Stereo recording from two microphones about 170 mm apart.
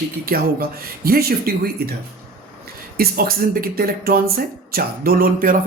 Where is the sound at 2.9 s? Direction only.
60° right (ahead or behind).